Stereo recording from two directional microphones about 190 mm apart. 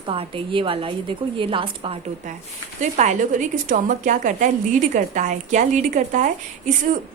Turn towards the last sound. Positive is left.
turn(degrees=-45)  # may be behind; listen again after turning